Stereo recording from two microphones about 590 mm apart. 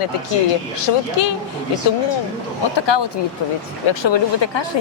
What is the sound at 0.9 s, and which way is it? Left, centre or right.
Speech, left.